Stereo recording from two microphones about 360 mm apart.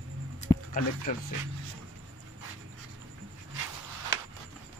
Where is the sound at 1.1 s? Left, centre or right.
Left.